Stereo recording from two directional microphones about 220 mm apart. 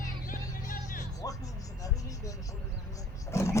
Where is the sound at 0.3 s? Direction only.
40° left (ahead or behind).